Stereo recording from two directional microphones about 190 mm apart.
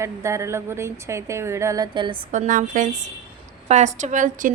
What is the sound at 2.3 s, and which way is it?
A woman's voice, 40° right (ahead or behind).